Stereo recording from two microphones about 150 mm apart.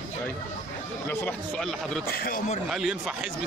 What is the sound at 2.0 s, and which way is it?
Speech, 90° left.